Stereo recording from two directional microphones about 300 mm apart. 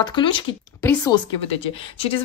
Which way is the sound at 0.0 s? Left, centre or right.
Centre.